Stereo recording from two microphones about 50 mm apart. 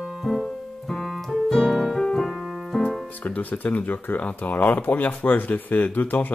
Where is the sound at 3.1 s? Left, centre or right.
Left.